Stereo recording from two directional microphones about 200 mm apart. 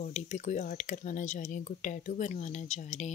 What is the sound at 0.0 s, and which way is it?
Speech, 35° left (ahead or behind).